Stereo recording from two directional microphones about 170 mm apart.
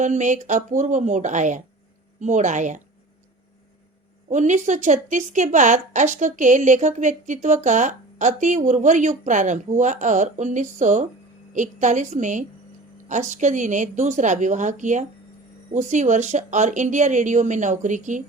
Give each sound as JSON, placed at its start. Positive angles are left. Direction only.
{"t": 0.0, "sound": "a woman's voice", "side_deg": -45}
{"t": 4.3, "sound": "a woman's voice", "side_deg": -45}